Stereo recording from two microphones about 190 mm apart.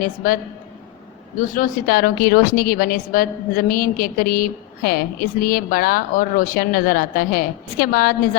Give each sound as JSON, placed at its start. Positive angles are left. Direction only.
{"t": 0.0, "sound": "a woman's voice", "side_deg": 45}
{"t": 1.4, "sound": "a woman's voice", "side_deg": 50}